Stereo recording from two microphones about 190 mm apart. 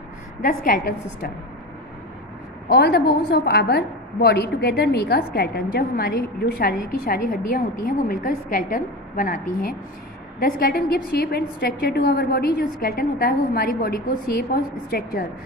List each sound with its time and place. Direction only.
0.4 s a woman's voice: 50° left (ahead or behind)
2.7 s a woman's voice: 60° left (ahead or behind)